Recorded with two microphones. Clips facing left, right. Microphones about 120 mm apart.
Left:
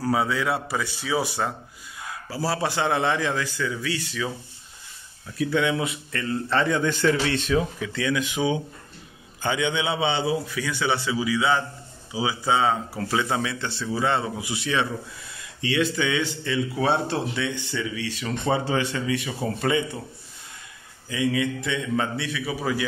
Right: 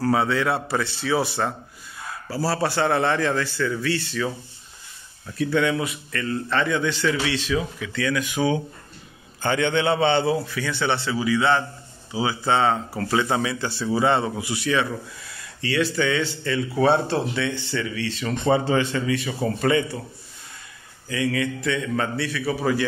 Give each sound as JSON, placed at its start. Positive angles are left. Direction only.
{"t": 0.0, "sound": "speech", "side_deg": 5}
{"t": 5.4, "sound": "speech", "side_deg": 15}
{"t": 5.9, "sound": "a man's voice", "side_deg": 25}
{"t": 6.9, "sound": "a man's voice", "side_deg": 45}
{"t": 7.5, "sound": "a man's voice", "side_deg": 30}
{"t": 9.4, "sound": "speech", "side_deg": 10}
{"t": 14.4, "sound": "a man's voice", "side_deg": 20}
{"t": 21.1, "sound": "speech", "side_deg": 15}